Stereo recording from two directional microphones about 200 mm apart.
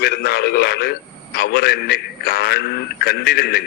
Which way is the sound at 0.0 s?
55° left (ahead or behind).